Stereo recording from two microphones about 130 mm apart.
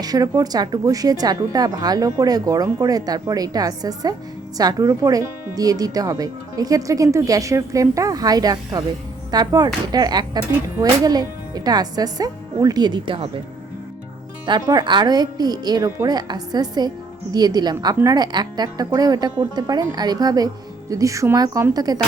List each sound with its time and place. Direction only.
0.0 s speech: 30° right (ahead or behind)
14.4 s speech: 35° right (ahead or behind)